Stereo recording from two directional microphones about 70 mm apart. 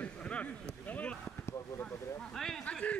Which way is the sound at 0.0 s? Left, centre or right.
Centre.